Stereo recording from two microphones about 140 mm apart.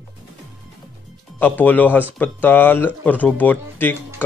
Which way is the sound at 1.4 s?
10° left (ahead or behind).